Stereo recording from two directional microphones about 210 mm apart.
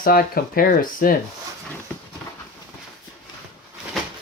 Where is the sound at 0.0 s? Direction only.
45° left (ahead or behind).